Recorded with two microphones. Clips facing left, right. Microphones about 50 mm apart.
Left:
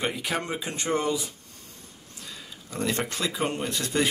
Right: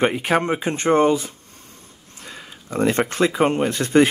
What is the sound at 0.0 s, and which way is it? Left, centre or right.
Speech, right.